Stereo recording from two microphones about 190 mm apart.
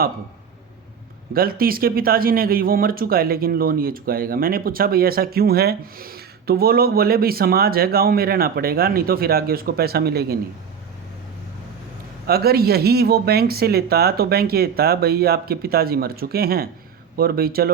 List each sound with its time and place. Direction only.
1.3 s speech: 50° right (ahead or behind)
12.3 s speech: 55° right (ahead or behind)